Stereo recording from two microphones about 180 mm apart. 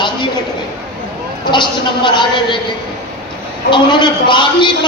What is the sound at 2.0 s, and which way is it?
Speech, 25° left (ahead or behind).